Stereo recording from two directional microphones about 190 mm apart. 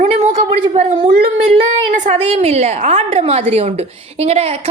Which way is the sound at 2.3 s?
35° right (ahead or behind).